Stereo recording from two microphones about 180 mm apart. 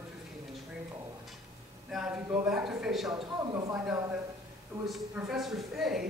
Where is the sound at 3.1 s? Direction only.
20° right (ahead or behind).